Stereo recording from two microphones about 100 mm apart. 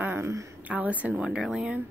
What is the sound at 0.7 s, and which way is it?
A woman's voice, 15° right (ahead or behind).